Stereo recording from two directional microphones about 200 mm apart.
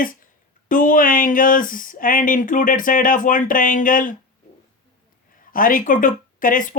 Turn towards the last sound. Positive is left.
turn(degrees=40)  # may be behind; listen again after turning